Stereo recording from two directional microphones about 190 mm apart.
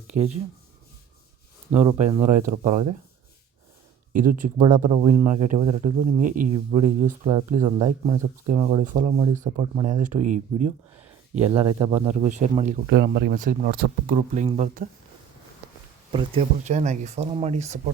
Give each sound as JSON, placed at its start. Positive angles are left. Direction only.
{"t": 0.1, "sound": "speech", "side_deg": -40}
{"t": 1.9, "sound": "speech", "side_deg": -15}
{"t": 2.5, "sound": "speech", "side_deg": -40}
{"t": 4.1, "sound": "speech", "side_deg": -45}
{"t": 6.5, "sound": "speech", "side_deg": -30}
{"t": 11.5, "sound": "speech", "side_deg": -20}
{"t": 12.2, "sound": "speech", "side_deg": -40}
{"t": 12.9, "sound": "speech", "side_deg": -60}
{"t": 13.4, "sound": "speech", "side_deg": -45}
{"t": 16.1, "sound": "speech", "side_deg": -30}